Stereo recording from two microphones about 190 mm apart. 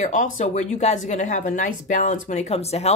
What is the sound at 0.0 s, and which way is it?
A woman's voice, 45° left (ahead or behind).